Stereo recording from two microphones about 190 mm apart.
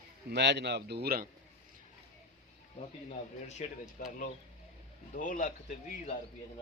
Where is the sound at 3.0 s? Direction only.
35° left (ahead or behind).